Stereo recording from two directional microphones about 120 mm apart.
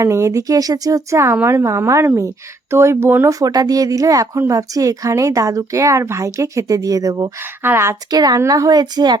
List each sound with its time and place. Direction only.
0.0 s speech: 25° right (ahead or behind)
3.3 s speech: 30° right (ahead or behind)
7.6 s speech: 20° right (ahead or behind)
8.1 s a woman's voice: 35° right (ahead or behind)